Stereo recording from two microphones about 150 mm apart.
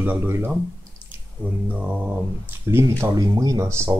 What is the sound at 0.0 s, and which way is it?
Speech, 15° right (ahead or behind).